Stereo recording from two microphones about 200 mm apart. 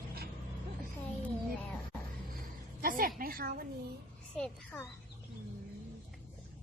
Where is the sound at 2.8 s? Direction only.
45° right (ahead or behind).